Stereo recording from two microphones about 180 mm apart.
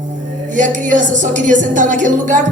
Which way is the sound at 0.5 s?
45° right (ahead or behind).